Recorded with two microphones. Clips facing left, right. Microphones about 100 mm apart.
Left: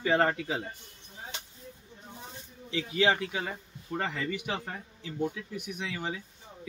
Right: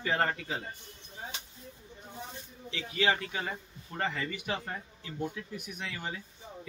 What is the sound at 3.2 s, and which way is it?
Speech, 10° left (ahead or behind).